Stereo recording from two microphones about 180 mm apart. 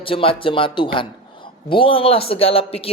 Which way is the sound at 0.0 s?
30° left (ahead or behind).